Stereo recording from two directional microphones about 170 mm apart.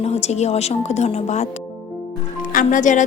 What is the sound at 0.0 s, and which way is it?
A woman's voice, 40° left (ahead or behind).